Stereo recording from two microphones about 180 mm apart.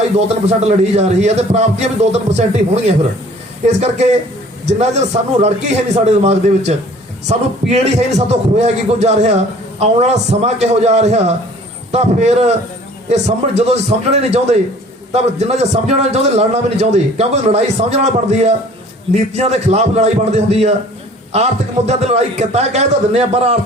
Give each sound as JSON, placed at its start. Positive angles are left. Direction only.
{"t": 0.4, "sound": "a man's voice", "side_deg": -35}